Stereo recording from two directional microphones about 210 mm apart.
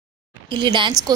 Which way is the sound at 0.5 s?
20° right (ahead or behind).